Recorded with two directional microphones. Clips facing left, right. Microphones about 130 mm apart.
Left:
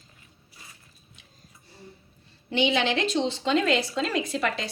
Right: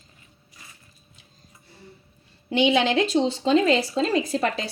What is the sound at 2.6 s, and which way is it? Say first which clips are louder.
A woman's voice: right 4 dB; 45° right (ahead or behind).